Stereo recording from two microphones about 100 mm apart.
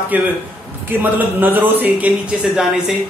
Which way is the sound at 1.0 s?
20° right (ahead or behind).